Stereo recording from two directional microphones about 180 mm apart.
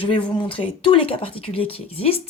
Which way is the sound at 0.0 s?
30° left (ahead or behind).